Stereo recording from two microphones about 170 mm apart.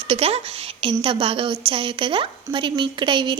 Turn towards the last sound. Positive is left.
turn(degrees=-30)  # may be behind; listen again after turning